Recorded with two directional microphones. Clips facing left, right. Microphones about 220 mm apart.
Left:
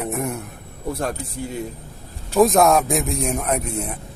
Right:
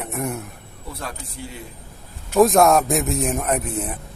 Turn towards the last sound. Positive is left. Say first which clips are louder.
# even
turn(degrees=0)  # may be behind; listen again after turning